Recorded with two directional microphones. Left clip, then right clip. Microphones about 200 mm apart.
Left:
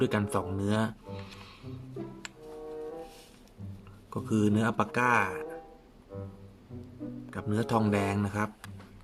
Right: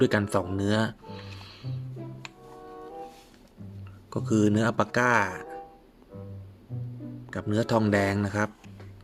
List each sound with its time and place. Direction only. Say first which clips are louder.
0.0 s speech: right 5 dB; 25° right (ahead or behind)
4.1 s speech: right 4 dB; 20° right (ahead or behind)
6.1 s music: left 2 dB; 5° right (ahead or behind)
7.3 s speech: right 5 dB; 20° right (ahead or behind)